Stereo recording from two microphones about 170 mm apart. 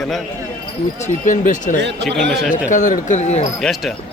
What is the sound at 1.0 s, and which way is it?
Speech, 50° left (ahead or behind).